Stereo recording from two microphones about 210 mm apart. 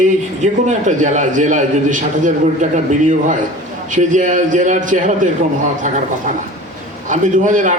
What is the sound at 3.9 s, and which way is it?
A man's voice, 35° right (ahead or behind).